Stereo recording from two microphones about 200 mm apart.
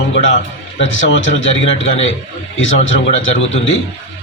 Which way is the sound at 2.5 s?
75° left (ahead or behind).